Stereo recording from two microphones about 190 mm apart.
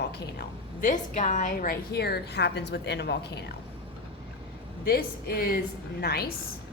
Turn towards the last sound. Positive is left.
turn(degrees=55)  # may be behind; listen again after turning